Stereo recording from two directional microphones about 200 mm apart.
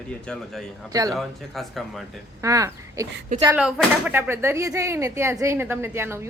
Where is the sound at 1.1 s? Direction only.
Centre (ahead or behind).